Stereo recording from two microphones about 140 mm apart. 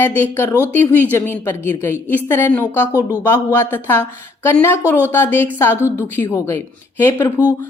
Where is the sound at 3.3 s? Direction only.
15° left (ahead or behind).